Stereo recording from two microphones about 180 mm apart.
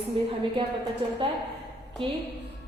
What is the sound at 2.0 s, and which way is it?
Speech, 30° right (ahead or behind).